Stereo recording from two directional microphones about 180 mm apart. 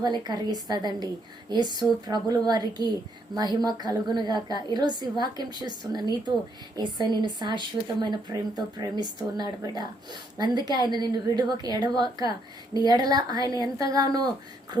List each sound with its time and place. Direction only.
0.0 s a woman's voice: 25° right (ahead or behind)